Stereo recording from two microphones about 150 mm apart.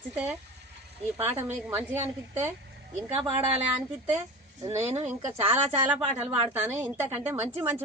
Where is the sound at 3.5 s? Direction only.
10° right (ahead or behind).